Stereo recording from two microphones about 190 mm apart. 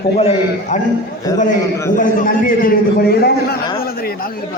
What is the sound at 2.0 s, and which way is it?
A man's voice, 45° left (ahead or behind).